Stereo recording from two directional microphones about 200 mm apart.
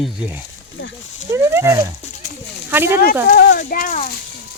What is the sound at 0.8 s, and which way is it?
Speech, 75° left (ahead or behind).